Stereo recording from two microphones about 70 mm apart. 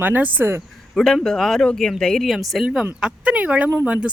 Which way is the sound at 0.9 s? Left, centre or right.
Centre.